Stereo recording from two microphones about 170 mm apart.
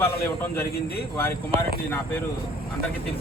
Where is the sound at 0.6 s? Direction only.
65° left (ahead or behind).